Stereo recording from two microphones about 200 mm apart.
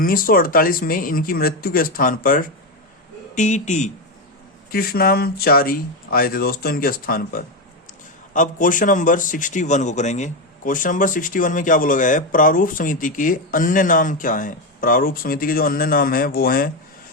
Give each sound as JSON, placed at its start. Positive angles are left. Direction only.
{"t": 0.0, "sound": "a man's voice", "side_deg": 45}
{"t": 4.7, "sound": "a man's voice", "side_deg": 50}